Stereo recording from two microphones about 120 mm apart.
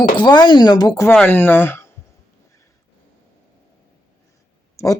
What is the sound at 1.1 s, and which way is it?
Speech, 10° left (ahead or behind).